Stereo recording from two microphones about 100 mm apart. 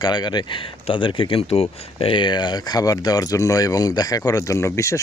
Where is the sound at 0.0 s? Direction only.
45° left (ahead or behind).